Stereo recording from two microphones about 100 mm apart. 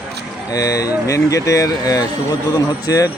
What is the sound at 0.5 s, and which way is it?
Speech, 35° left (ahead or behind).